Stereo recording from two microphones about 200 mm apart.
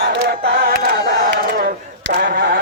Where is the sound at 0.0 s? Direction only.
50° right (ahead or behind).